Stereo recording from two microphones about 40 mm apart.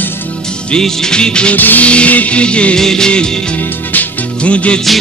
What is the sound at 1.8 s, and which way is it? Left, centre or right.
Music, left.